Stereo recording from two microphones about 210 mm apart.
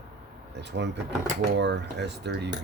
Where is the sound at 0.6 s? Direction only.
55° right (ahead or behind).